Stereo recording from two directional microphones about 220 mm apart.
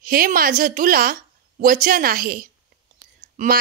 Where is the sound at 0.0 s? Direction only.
40° right (ahead or behind).